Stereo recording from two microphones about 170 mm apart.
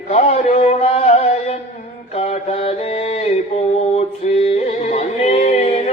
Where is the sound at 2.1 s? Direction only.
40° left (ahead or behind).